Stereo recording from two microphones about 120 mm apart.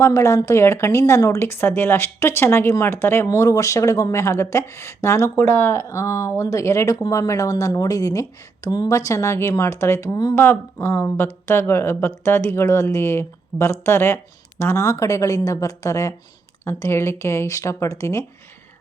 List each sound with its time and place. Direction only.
0.0 s speech: 25° left (ahead or behind)
10.3 s speech: 20° left (ahead or behind)